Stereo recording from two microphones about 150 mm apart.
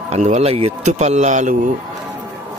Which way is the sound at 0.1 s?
50° right (ahead or behind).